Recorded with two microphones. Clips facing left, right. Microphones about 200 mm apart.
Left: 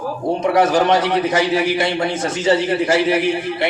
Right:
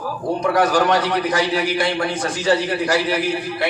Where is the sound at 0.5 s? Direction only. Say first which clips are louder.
Left 2 dB; 25° left (ahead or behind).